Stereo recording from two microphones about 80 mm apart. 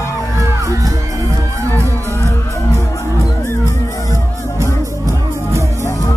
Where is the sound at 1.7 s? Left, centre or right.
Left.